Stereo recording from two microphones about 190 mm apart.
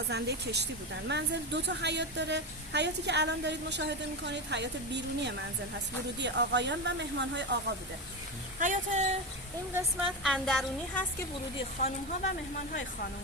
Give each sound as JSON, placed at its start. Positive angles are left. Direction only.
{"t": 0.1, "sound": "speech", "side_deg": -60}
{"t": 8.5, "sound": "speech", "side_deg": -40}
{"t": 9.7, "sound": "a woman's voice", "side_deg": -5}
{"t": 11.8, "sound": "speech", "side_deg": 35}